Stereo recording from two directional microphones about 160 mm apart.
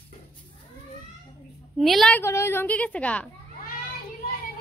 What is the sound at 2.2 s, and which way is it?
Speech, 15° left (ahead or behind).